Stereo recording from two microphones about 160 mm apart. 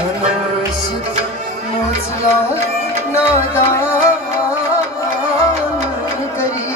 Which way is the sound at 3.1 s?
15° left (ahead or behind).